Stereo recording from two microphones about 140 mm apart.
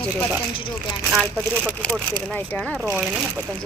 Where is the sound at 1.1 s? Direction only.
Centre (ahead or behind).